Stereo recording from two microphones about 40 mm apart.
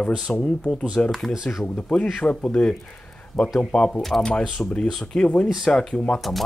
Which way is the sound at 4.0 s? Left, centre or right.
Centre.